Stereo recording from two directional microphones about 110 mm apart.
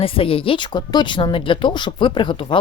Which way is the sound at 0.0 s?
55° left (ahead or behind).